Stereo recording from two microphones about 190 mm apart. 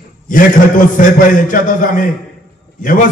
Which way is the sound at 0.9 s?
45° left (ahead or behind).